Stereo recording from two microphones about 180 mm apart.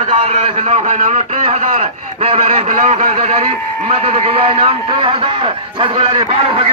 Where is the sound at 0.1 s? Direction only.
35° right (ahead or behind).